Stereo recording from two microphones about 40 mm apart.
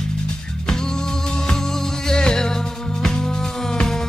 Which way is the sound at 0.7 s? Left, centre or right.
Centre.